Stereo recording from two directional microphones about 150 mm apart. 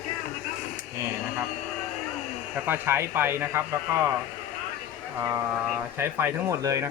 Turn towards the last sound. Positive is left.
turn(degrees=-20)  # may be behind; listen again after turning